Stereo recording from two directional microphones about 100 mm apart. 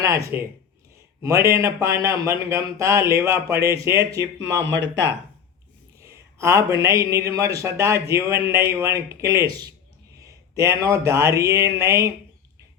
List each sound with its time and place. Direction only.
0.0 s speech: 30° right (ahead or behind)
6.0 s speech: 30° right (ahead or behind)